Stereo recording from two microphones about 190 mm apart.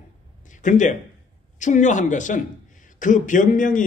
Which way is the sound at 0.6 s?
40° left (ahead or behind).